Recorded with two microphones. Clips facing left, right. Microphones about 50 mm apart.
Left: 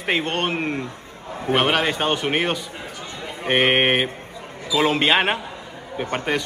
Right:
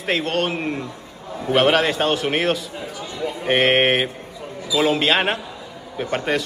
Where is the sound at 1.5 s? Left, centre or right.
Centre.